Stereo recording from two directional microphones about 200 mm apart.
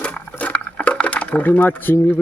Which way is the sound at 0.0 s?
5° left (ahead or behind).